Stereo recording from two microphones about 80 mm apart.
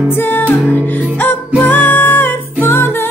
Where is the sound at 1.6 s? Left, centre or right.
Left.